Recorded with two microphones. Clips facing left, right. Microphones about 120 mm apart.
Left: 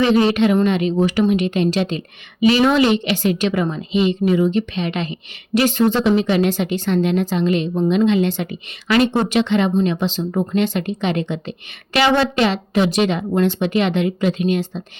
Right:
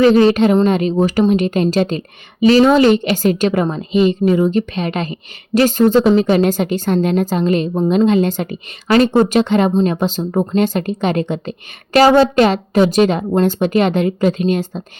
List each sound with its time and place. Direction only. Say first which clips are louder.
0.0 s a woman's voice: right 5 dB; 40° right (ahead or behind)